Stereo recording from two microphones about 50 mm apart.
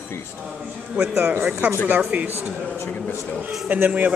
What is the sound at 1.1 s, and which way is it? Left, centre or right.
Speech, right.